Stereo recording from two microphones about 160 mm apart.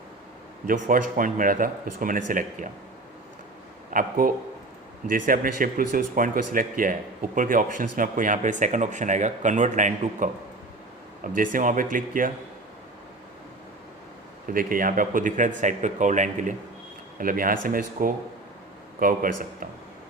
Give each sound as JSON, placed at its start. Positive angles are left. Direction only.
{"t": 0.7, "sound": "a man's voice", "side_deg": -55}
{"t": 3.9, "sound": "a man's voice", "side_deg": -60}
{"t": 14.4, "sound": "a man's voice", "side_deg": -60}